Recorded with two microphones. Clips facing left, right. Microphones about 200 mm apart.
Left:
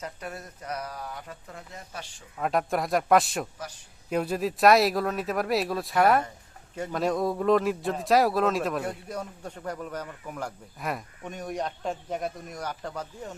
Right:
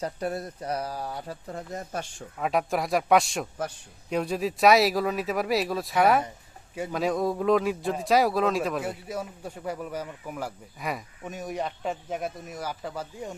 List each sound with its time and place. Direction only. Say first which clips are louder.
0.0 s speech: right 7 dB; 35° right (ahead or behind)
2.4 s a man's voice: even; centre (ahead or behind)